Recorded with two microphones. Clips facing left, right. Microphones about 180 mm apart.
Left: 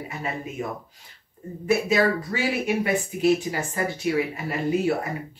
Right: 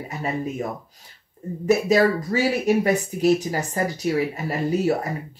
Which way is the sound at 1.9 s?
40° right (ahead or behind).